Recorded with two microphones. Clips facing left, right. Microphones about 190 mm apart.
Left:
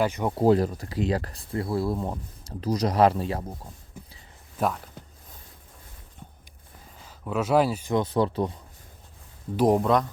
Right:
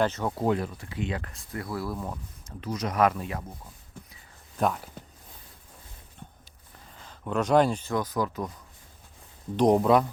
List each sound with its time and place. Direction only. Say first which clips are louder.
0.0 s speech: left 1 dB; 15° left (ahead or behind)
0.3 s speech: left 11 dB; 35° left (ahead or behind)
4.5 s speech: even; centre (ahead or behind)
7.0 s speech: even; 5° left (ahead or behind)
7.9 s speech: left 8 dB; 30° left (ahead or behind)
9.6 s speech: right 1 dB; centre (ahead or behind)